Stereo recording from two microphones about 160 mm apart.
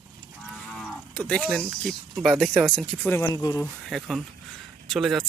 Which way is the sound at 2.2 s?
Centre (ahead or behind).